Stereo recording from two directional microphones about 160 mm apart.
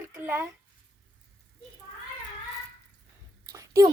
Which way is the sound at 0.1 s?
15° right (ahead or behind).